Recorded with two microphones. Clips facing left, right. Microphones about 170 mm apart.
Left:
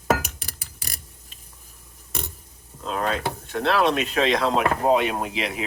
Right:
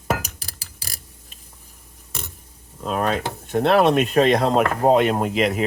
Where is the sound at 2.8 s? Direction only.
55° right (ahead or behind).